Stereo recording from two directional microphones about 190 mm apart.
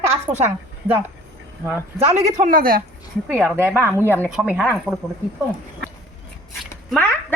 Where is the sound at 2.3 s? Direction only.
50° right (ahead or behind).